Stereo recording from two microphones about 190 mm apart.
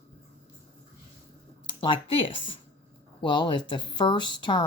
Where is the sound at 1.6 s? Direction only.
25° left (ahead or behind).